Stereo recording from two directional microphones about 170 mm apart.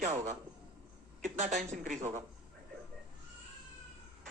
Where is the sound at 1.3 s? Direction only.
45° right (ahead or behind).